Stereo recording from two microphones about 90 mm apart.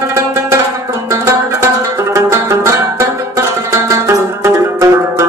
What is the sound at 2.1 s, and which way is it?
Music, 30° right (ahead or behind).